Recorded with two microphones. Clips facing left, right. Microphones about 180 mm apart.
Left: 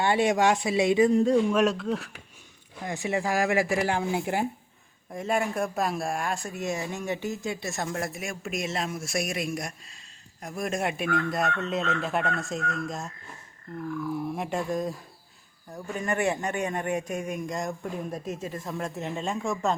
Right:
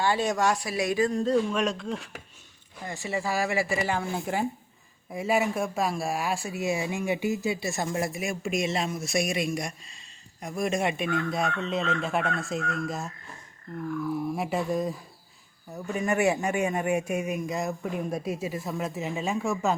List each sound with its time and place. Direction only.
0.0 s speech: 25° left (ahead or behind)
1.2 s speech: 5° left (ahead or behind)
2.8 s speech: 15° left (ahead or behind)
5.1 s speech: 5° right (ahead or behind)
14.3 s speech: 5° right (ahead or behind)